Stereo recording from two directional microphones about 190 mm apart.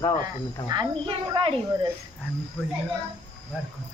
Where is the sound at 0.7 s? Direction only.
25° right (ahead or behind).